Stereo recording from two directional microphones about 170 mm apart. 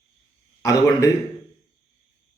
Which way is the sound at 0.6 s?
20° left (ahead or behind).